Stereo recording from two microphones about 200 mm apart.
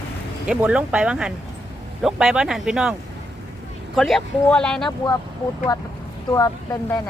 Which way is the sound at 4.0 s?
Centre (ahead or behind).